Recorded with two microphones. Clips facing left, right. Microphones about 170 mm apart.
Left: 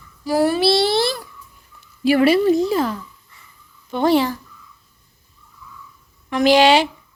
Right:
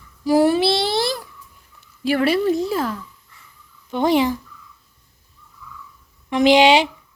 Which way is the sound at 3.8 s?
15° right (ahead or behind).